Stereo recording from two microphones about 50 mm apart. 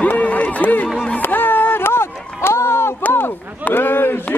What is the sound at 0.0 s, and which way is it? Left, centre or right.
Music, left.